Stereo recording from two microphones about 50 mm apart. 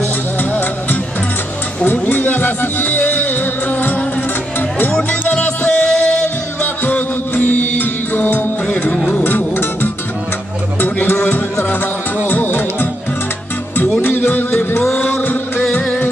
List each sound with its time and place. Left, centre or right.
0.4 s music: left
6.6 s music: left
14.0 s music: left